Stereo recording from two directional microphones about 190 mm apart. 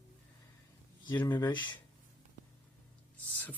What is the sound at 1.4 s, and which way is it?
Speech, 25° left (ahead or behind).